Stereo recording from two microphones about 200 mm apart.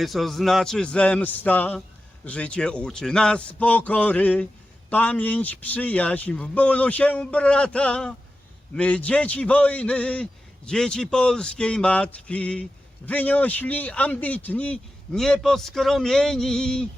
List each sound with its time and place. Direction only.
0.0 s a man's voice: centre (ahead or behind)